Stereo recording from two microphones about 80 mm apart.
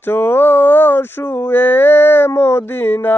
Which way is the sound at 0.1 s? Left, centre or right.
Left.